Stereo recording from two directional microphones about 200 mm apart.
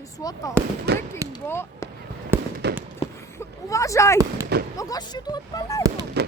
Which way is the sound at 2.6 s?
60° right (ahead or behind).